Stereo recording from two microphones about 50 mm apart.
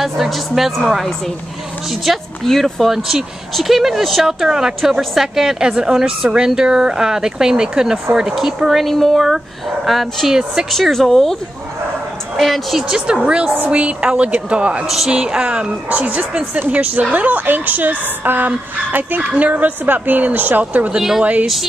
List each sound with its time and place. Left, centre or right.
0.0 s a woman's voice: centre
10.3 s a woman's voice: centre
10.7 s speech: centre
12.4 s speech: centre
12.9 s a woman's voice: centre